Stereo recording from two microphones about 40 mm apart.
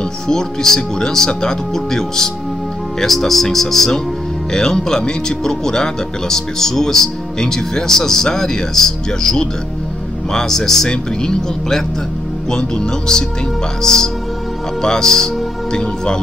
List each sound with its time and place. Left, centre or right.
0.3 s speech: centre